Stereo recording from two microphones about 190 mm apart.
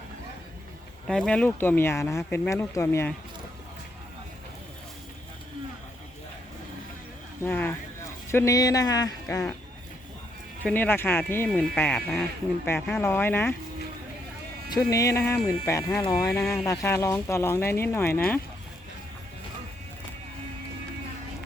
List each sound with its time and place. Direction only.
1.0 s speech: centre (ahead or behind)
7.4 s speech: 10° left (ahead or behind)
10.6 s speech: 10° left (ahead or behind)
14.7 s speech: 20° left (ahead or behind)